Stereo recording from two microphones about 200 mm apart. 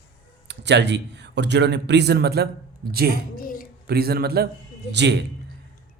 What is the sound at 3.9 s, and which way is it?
A man's voice, 50° right (ahead or behind).